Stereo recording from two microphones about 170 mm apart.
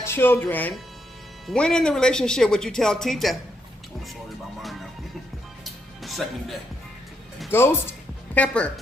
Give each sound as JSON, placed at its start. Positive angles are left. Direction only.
{"t": 0.0, "sound": "speech", "side_deg": 15}
{"t": 5.6, "sound": "music", "side_deg": 0}
{"t": 7.5, "sound": "speech", "side_deg": 15}